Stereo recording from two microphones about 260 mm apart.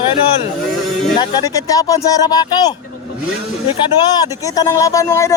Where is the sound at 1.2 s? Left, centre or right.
Centre.